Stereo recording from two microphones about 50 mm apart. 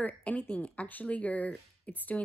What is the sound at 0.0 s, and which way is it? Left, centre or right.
A woman's voice, left.